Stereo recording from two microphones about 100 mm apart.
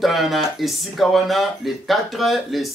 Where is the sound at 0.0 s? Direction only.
Centre (ahead or behind).